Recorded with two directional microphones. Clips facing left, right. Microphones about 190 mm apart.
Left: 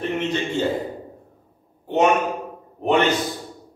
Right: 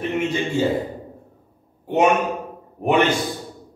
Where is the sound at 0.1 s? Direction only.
10° right (ahead or behind).